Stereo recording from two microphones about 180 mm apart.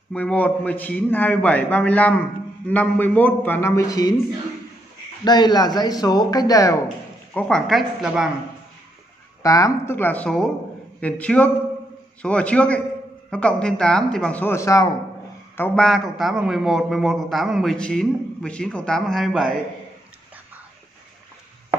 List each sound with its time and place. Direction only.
0.1 s a man's voice: 10° left (ahead or behind)
5.2 s speech: 25° left (ahead or behind)
7.3 s a man's voice: 5° left (ahead or behind)
9.4 s a man's voice: 20° left (ahead or behind); by 19.6 s centre (ahead or behind)